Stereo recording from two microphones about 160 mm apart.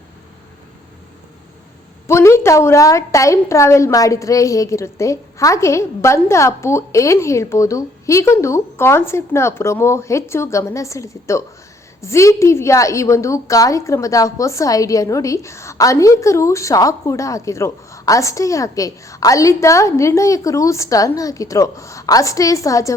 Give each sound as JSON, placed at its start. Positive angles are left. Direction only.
{"t": 2.0, "sound": "a woman's voice", "side_deg": 15}